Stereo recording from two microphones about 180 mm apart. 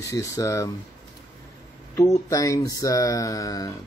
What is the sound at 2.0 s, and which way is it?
Speech, 20° left (ahead or behind).